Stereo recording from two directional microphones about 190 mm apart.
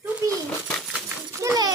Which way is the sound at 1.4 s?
15° right (ahead or behind).